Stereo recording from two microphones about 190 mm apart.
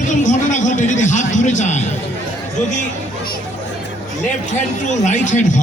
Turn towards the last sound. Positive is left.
turn(degrees=40)  # may be behind; listen again after turning